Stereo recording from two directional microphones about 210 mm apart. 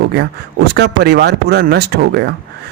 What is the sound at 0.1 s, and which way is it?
Speech, 50° right (ahead or behind).